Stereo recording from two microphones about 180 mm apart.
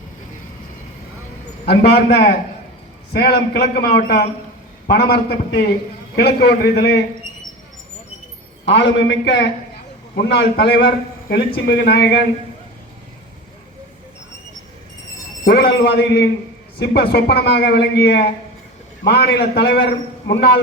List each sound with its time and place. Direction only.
1.6 s speech: 65° left (ahead or behind)
8.6 s speech: 75° left (ahead or behind)
15.4 s speech: 60° left (ahead or behind)